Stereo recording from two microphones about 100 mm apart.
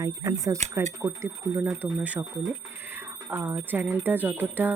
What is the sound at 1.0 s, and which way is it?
Speech, 25° right (ahead or behind).